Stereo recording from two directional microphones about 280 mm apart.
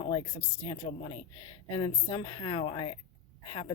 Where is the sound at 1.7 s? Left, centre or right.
Centre.